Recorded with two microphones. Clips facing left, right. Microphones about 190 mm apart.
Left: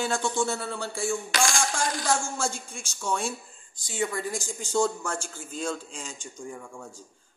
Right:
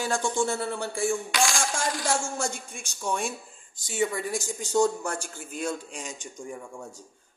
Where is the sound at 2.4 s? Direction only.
20° right (ahead or behind).